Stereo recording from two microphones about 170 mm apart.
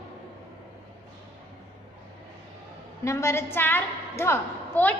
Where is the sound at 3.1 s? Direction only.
15° left (ahead or behind).